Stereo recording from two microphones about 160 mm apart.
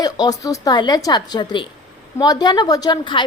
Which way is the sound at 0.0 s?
25° left (ahead or behind).